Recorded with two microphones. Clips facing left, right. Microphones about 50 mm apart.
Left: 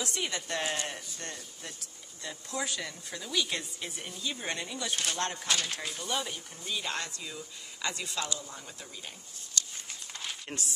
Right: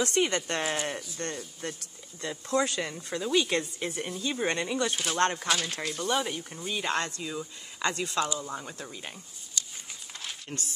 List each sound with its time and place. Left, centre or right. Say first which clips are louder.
0.0 s speech: right 8 dB; right
2.2 s a woman's voice: right 8 dB; right
4.9 s speech: right 3 dB; centre
5.2 s speech: right 8 dB; right
5.5 s speech: right 3 dB; centre
6.7 s a woman's voice: right 5 dB; right
10.5 s speech: right 2 dB; centre